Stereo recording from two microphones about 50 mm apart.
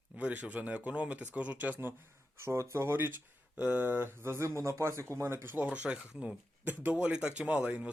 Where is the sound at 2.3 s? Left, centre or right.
Right.